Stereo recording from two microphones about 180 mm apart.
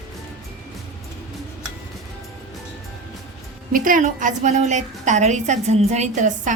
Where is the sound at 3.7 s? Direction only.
50° right (ahead or behind).